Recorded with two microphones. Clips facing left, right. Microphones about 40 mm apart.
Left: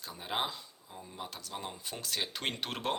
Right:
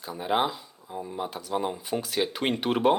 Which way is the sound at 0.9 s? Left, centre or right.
Right.